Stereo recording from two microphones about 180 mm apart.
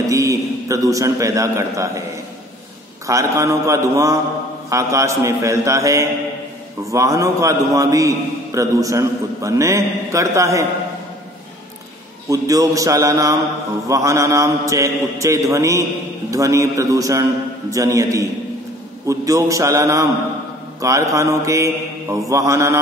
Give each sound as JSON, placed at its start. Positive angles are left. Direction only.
{"t": 0.0, "sound": "a man's voice", "side_deg": -15}
{"t": 3.1, "sound": "a man's voice", "side_deg": -15}
{"t": 12.3, "sound": "a man's voice", "side_deg": -20}